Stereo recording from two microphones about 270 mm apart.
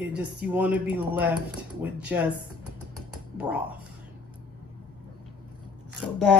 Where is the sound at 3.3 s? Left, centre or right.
Centre.